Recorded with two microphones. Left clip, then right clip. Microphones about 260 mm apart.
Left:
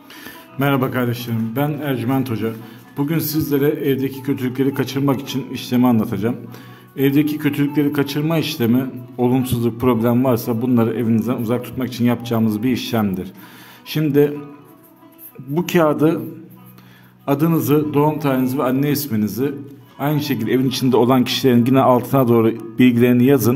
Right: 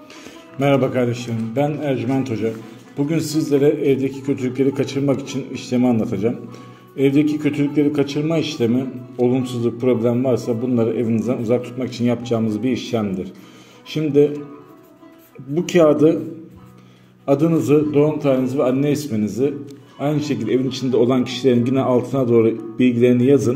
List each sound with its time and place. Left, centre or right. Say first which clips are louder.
0.2 s a man's voice: right 1 dB; centre
15.5 s a man's voice: right 2 dB; centre
17.3 s a man's voice: right 2 dB; left